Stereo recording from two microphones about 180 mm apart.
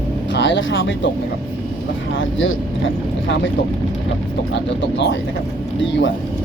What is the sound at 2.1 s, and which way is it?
Speech, 90° left.